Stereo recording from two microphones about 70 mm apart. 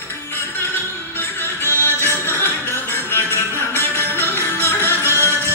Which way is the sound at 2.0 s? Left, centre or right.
Left.